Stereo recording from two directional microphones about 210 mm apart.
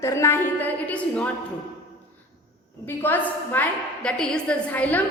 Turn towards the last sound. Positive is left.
turn(degrees=5)  # may be behind; listen again after turning